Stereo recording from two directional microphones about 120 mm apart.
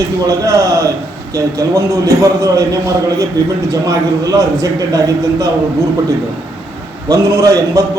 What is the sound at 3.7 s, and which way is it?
A man's voice, 30° right (ahead or behind).